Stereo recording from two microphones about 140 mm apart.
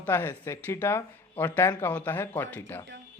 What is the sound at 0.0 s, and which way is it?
Speech, 15° left (ahead or behind).